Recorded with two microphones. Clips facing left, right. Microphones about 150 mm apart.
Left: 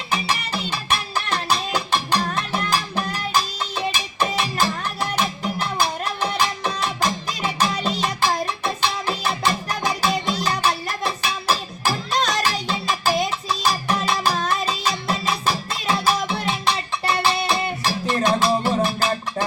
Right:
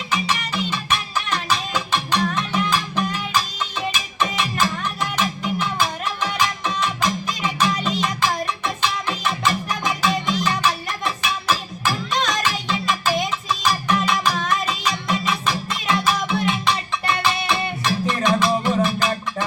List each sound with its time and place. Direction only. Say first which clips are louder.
0.1 s music: even; 40° left (ahead or behind)